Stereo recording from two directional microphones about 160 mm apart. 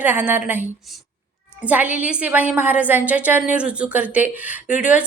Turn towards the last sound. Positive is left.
turn(degrees=-10)  # may be behind; listen again after turning